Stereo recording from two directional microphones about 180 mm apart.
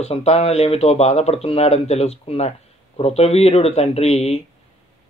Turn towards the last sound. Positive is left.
turn(degrees=35)  # may be behind; listen again after turning